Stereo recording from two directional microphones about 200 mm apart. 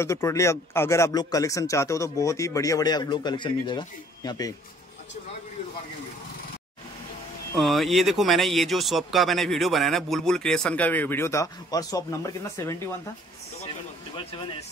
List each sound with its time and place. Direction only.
0.0 s a man's voice: 15° left (ahead or behind)
7.5 s speech: centre (ahead or behind)
14.1 s speech: 25° left (ahead or behind)